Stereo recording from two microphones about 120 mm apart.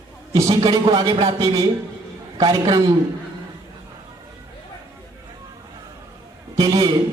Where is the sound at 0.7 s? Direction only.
50° right (ahead or behind).